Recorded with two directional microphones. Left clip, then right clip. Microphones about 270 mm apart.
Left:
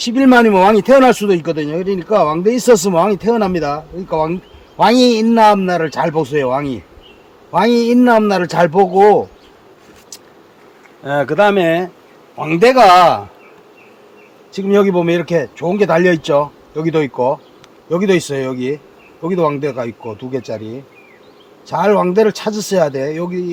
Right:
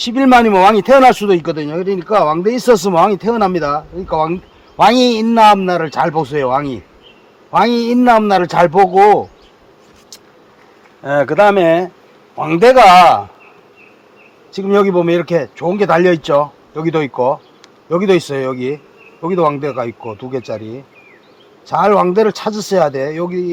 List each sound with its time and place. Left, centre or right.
0.0 s speech: centre
11.0 s speech: centre
14.5 s speech: centre
21.7 s speech: centre